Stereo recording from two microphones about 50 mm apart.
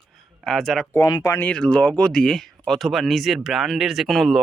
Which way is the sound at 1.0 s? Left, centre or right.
Left.